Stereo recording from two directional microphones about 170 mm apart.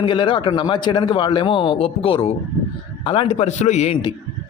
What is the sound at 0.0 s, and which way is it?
A man's voice, 30° left (ahead or behind).